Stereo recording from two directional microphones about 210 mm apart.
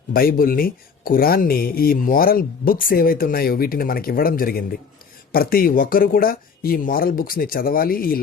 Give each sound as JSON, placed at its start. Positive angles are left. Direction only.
{"t": 0.1, "sound": "speech", "side_deg": 45}